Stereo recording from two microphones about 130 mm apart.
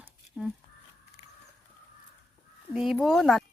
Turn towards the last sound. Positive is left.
turn(degrees=0)  # may be behind; listen again after turning